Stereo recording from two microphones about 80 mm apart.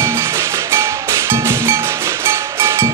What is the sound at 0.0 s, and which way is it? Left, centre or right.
Music, right.